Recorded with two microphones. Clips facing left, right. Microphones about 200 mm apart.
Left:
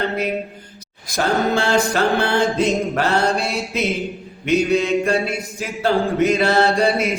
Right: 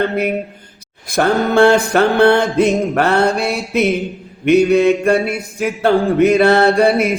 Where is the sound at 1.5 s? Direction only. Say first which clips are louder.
Right 7 dB; 60° right (ahead or behind).